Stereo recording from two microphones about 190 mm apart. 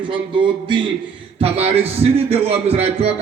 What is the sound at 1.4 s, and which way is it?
Speech, 30° right (ahead or behind).